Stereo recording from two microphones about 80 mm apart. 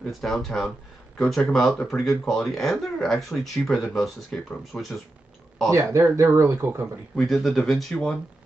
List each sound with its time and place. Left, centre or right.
0.1 s speech: centre
4.7 s speech: centre
5.7 s speech: right
7.2 s speech: centre
7.9 s speech: centre